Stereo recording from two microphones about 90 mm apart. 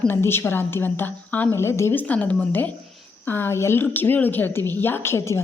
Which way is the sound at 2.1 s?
20° left (ahead or behind).